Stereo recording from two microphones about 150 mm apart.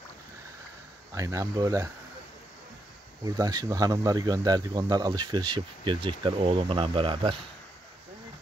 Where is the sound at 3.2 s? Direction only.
25° right (ahead or behind).